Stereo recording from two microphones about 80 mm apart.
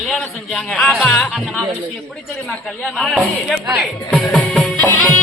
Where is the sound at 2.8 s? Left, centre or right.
Centre.